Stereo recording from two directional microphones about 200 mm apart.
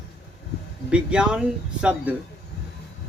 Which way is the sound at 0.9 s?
5° right (ahead or behind).